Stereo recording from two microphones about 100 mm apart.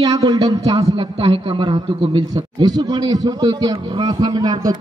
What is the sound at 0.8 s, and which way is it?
A man's voice, 65° right (ahead or behind).